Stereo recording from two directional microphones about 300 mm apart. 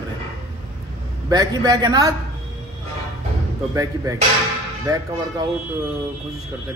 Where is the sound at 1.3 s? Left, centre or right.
Centre.